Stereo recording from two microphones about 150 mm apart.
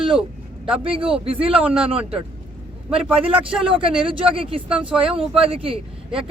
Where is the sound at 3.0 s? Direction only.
5° right (ahead or behind).